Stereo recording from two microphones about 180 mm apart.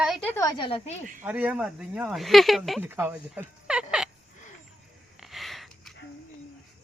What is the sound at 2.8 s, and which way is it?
Speech, 10° right (ahead or behind).